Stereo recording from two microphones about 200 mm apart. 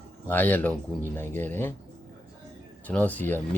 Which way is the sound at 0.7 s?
15° right (ahead or behind).